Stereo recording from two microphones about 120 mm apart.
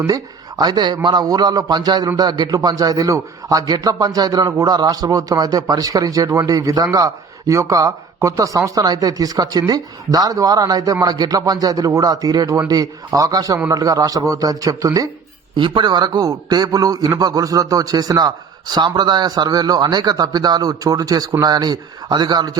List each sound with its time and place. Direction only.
0.0 s a man's voice: 30° right (ahead or behind)
15.5 s a man's voice: 45° right (ahead or behind)